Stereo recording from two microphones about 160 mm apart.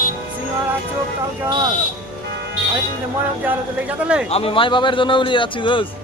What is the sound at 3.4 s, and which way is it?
Speech, 10° right (ahead or behind).